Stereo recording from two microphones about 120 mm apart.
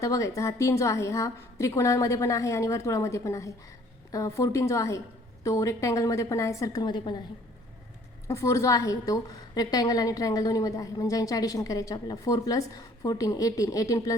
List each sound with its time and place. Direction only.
0.0 s a woman's voice: 25° left (ahead or behind)
8.3 s a woman's voice: 25° left (ahead or behind)